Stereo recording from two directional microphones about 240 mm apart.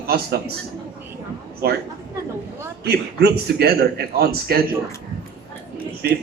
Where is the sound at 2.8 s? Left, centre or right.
Right.